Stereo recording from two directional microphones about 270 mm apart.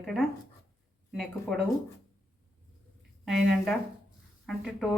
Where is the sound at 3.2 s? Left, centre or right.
Centre.